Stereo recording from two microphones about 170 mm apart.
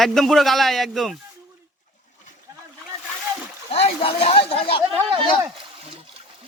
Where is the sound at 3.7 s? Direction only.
35° left (ahead or behind).